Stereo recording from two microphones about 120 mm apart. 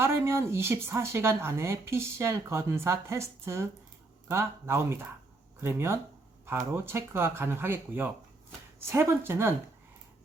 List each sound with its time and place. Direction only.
0.0 s a woman's voice: 20° right (ahead or behind)